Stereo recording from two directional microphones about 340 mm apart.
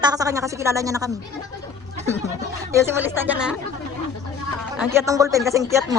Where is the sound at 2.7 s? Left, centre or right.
Centre.